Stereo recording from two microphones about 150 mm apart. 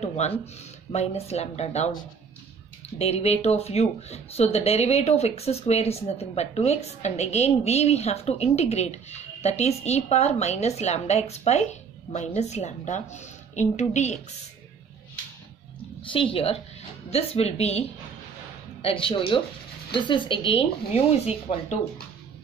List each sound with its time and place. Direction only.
0.0 s speech: 50° left (ahead or behind)
3.0 s speech: 45° left (ahead or behind)
16.0 s speech: 35° left (ahead or behind)